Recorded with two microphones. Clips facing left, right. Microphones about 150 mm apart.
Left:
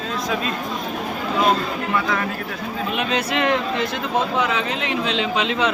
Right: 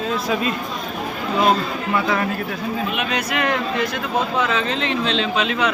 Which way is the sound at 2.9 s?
30° left (ahead or behind).